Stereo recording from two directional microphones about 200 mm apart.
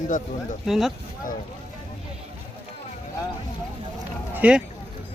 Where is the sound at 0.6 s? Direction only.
Centre (ahead or behind).